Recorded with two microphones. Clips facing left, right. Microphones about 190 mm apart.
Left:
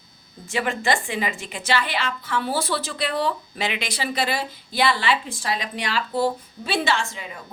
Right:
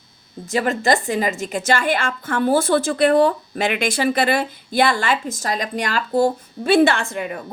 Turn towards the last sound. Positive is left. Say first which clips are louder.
# right 4 dB
turn(degrees=-60)  # may be behind; listen again after turning